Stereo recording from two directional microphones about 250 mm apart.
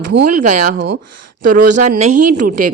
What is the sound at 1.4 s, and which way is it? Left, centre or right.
A woman's voice, right.